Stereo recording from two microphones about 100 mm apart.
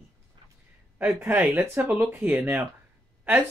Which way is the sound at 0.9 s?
20° right (ahead or behind).